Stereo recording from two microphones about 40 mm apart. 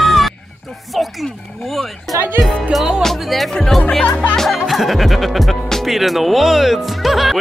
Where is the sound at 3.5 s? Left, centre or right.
Centre.